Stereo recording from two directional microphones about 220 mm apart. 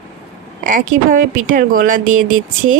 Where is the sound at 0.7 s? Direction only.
40° right (ahead or behind).